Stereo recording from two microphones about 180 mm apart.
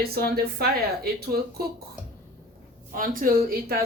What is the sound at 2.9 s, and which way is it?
Speech, 50° right (ahead or behind).